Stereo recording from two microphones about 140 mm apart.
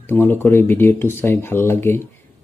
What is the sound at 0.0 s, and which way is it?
Speech, 15° left (ahead or behind).